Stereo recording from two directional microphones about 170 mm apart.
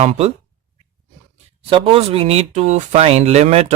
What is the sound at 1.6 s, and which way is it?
Speech, 30° right (ahead or behind).